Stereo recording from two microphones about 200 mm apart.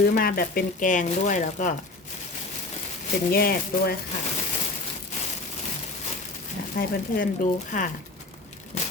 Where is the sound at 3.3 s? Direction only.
50° left (ahead or behind).